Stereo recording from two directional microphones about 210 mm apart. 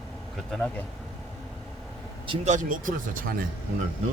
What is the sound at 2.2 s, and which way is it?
Speech, 30° right (ahead or behind).